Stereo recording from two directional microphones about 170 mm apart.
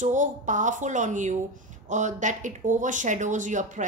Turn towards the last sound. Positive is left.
turn(degrees=-45)  # may be behind; listen again after turning